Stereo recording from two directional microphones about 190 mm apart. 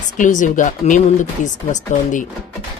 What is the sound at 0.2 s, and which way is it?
Speech, 40° left (ahead or behind).